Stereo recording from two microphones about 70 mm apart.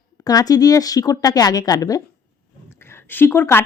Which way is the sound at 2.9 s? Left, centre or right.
Left.